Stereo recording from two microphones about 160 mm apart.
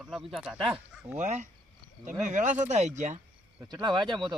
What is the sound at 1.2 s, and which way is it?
Speech, 50° right (ahead or behind).